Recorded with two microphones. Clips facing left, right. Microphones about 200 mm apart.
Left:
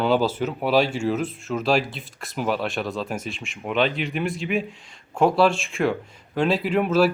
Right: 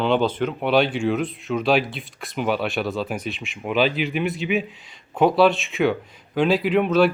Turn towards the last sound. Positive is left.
turn(degrees=5)  # may be behind; listen again after turning